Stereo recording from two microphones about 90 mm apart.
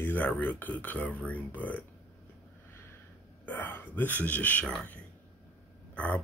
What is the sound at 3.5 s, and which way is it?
Speech, 20° left (ahead or behind).